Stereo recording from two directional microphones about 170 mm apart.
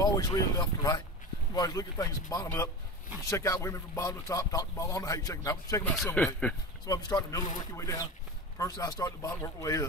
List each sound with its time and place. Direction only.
0.0 s speech: 20° left (ahead or behind)
5.9 s a man's voice: 10° left (ahead or behind)
6.9 s speech: 20° left (ahead or behind)